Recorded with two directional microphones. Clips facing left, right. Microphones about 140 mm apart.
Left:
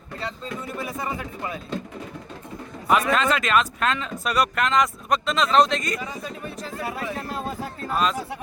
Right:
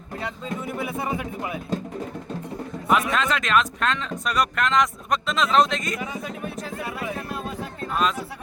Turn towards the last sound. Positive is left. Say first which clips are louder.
# left 1 dB
turn(degrees=35)  # may be behind; listen again after turning